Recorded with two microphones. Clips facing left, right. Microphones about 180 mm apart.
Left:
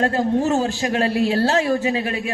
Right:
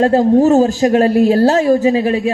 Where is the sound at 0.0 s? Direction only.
35° right (ahead or behind).